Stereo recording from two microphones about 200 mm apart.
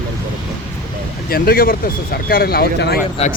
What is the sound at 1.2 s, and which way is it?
Speech, 50° left (ahead or behind).